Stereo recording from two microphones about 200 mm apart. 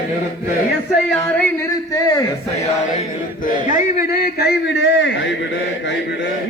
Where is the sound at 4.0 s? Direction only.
55° left (ahead or behind).